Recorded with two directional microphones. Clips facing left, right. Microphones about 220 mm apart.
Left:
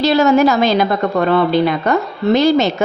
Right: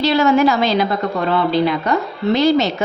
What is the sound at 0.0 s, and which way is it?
A woman's voice, 40° left (ahead or behind).